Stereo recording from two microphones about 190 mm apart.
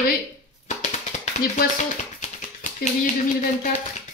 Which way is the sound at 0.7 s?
40° left (ahead or behind).